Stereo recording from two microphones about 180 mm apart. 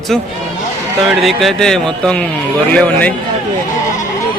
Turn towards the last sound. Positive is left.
turn(degrees=10)  # may be behind; listen again after turning